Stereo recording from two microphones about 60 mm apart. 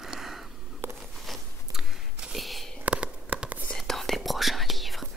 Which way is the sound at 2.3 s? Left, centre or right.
Centre.